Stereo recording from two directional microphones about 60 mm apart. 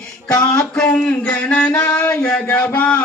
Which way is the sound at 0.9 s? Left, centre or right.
Left.